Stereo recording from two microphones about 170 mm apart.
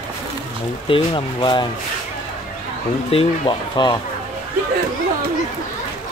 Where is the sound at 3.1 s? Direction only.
30° left (ahead or behind).